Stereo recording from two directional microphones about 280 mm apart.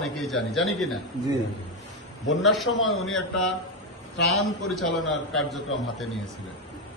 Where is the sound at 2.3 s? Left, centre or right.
Centre.